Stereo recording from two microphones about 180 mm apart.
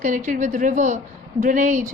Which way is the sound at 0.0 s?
45° right (ahead or behind).